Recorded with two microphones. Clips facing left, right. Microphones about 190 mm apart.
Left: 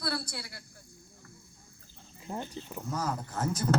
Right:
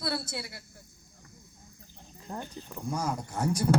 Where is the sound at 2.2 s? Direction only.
15° left (ahead or behind).